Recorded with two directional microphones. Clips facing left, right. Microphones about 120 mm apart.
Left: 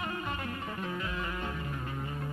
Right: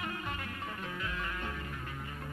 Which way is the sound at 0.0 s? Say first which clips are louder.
Left 3 dB; 30° left (ahead or behind).